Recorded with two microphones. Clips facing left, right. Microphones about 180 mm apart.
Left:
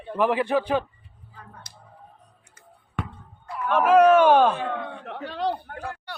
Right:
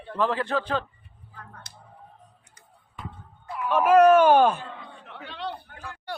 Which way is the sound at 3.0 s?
75° left (ahead or behind).